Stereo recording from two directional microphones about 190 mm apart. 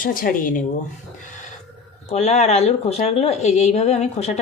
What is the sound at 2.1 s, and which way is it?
Speech, 35° left (ahead or behind).